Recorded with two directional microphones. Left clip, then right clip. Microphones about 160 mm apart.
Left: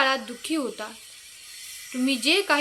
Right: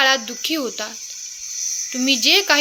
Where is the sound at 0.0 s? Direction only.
30° right (ahead or behind).